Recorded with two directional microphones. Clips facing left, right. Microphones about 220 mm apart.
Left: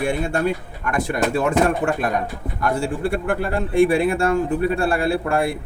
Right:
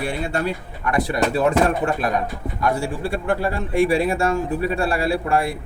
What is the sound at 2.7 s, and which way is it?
Speech, 55° left (ahead or behind).